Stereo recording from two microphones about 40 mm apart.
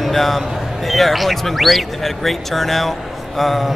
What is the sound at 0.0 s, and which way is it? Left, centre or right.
Speech, centre.